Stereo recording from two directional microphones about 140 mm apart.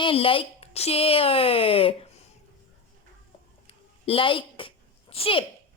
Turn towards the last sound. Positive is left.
turn(degrees=40)  # may be behind; listen again after turning